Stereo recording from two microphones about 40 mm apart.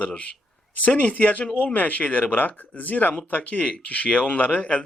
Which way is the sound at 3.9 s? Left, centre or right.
Left.